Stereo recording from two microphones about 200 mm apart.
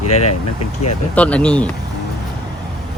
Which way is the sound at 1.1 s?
5° left (ahead or behind).